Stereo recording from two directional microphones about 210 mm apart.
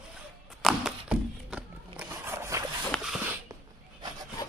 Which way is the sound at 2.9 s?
Centre (ahead or behind).